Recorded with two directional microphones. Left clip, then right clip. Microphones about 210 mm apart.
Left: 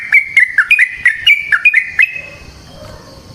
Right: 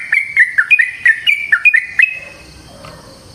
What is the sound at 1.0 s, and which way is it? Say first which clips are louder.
Bird: left 2 dB; 10° left (ahead or behind).